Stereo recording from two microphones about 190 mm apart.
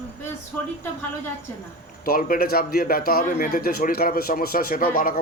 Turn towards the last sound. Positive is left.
turn(degrees=50)  # may be behind; listen again after turning